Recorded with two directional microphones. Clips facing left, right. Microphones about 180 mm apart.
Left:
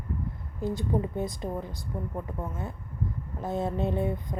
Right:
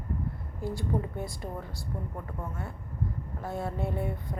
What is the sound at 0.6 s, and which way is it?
Speech, 20° left (ahead or behind).